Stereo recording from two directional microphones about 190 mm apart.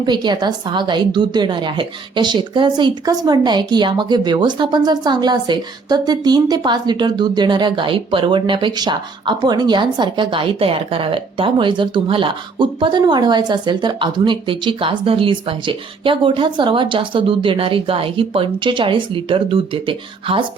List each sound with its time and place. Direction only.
0.0 s a woman's voice: 25° right (ahead or behind)